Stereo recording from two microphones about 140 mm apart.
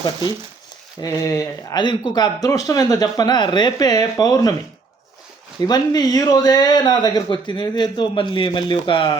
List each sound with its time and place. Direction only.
0.0 s speech: 30° left (ahead or behind)
5.5 s speech: 30° left (ahead or behind)